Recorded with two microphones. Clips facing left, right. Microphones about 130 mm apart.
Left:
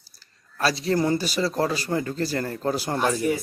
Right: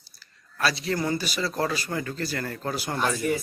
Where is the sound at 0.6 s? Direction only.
35° left (ahead or behind).